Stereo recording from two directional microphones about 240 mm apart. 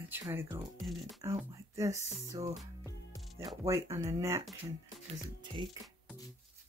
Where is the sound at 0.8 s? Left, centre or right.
Centre.